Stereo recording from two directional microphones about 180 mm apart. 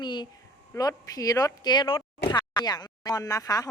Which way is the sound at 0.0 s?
25° left (ahead or behind).